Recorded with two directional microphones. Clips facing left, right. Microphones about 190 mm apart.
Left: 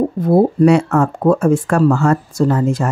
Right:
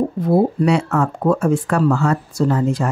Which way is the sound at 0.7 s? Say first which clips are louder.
Left 5 dB; 50° left (ahead or behind).